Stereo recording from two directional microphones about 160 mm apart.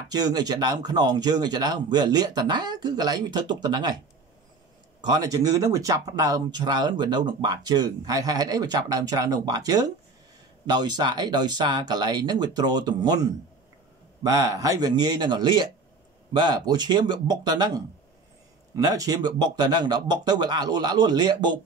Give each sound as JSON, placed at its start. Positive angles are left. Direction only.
{"t": 0.1, "sound": "speech", "side_deg": -25}
{"t": 5.0, "sound": "speech", "side_deg": -25}